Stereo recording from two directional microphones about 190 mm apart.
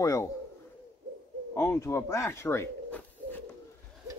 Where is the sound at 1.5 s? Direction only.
15° left (ahead or behind).